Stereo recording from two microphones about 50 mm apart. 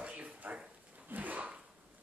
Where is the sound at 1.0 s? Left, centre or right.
Right.